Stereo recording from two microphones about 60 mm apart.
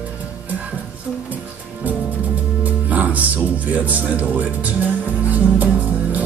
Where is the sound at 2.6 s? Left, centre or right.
Right.